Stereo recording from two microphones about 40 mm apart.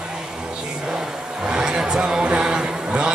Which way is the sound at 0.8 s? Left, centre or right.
Centre.